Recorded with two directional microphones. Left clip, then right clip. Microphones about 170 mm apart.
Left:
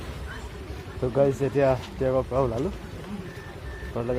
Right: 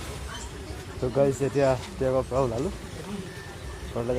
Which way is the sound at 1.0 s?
Centre (ahead or behind).